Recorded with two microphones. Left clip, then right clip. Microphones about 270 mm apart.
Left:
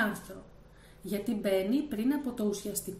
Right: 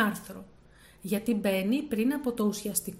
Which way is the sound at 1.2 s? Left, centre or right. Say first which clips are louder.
Even; right.